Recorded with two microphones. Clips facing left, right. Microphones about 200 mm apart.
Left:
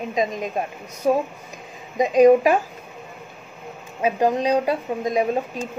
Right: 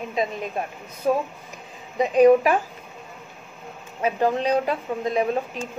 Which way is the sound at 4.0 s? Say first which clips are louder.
Left 2 dB; 15° left (ahead or behind).